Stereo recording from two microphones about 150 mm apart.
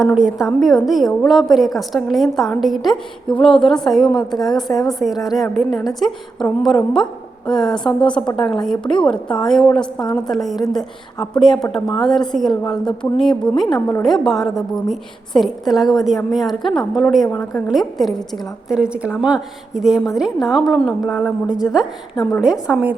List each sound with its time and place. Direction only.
0.0 s a woman's voice: 5° right (ahead or behind)
4.1 s a woman's voice: 25° left (ahead or behind)
4.4 s a woman's voice: centre (ahead or behind)